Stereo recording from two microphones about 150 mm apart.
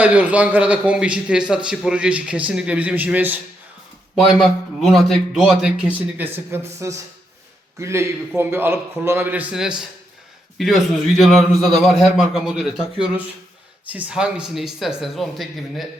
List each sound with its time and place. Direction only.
0.0 s a man's voice: 10° right (ahead or behind)
4.3 s a man's voice: centre (ahead or behind)